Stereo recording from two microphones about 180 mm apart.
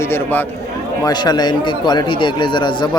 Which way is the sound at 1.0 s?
25° left (ahead or behind).